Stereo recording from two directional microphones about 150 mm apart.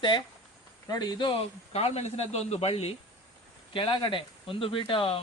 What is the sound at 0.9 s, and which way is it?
A man's voice, 30° left (ahead or behind).